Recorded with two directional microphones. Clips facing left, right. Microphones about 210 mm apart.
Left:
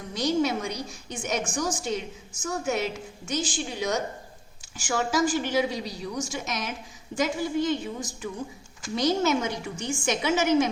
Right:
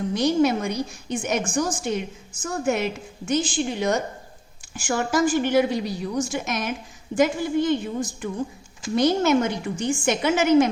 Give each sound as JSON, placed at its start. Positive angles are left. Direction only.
{"t": 0.1, "sound": "a woman's voice", "side_deg": -55}